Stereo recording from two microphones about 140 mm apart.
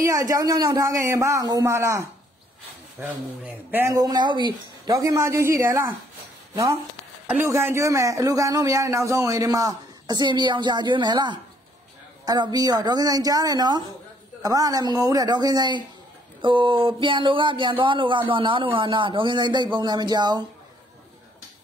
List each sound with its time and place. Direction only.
0.0 s a man's voice: 25° right (ahead or behind)